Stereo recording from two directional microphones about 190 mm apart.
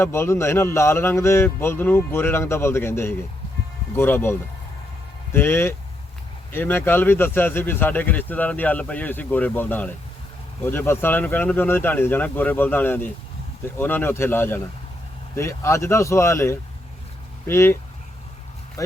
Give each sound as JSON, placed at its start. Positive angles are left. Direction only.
{"t": 0.0, "sound": "a man's voice", "side_deg": 15}
{"t": 18.8, "sound": "speech", "side_deg": 20}